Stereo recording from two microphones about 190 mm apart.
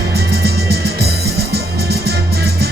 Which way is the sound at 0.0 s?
55° right (ahead or behind).